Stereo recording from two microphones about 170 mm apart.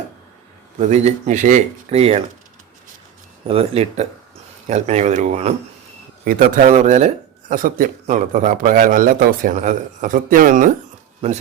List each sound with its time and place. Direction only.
0.8 s speech: 40° right (ahead or behind)
3.4 s speech: 35° right (ahead or behind); by 10.8 s 50° right (ahead or behind)